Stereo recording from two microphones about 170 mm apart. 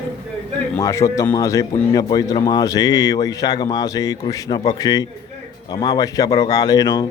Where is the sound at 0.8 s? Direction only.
15° left (ahead or behind).